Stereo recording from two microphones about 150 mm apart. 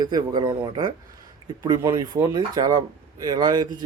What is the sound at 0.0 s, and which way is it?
Speech, 25° right (ahead or behind).